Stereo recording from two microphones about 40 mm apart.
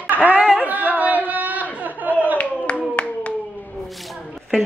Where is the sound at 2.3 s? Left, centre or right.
Left.